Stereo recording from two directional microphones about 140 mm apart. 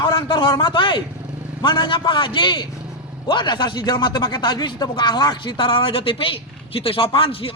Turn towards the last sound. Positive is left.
turn(degrees=40)  # may be behind; listen again after turning